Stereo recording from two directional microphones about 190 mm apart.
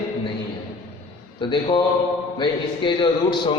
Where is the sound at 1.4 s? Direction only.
25° left (ahead or behind).